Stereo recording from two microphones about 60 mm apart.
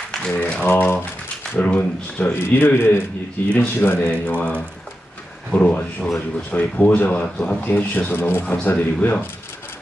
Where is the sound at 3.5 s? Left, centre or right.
Centre.